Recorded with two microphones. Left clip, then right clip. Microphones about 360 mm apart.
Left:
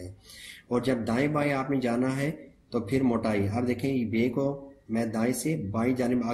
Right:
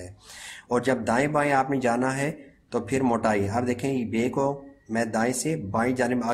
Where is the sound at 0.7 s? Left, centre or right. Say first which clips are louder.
Right 4 dB; centre.